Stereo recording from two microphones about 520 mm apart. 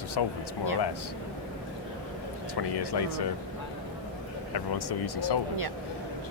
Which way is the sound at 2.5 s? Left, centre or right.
Left.